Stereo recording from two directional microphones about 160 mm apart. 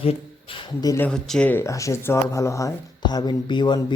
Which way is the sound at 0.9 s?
15° left (ahead or behind).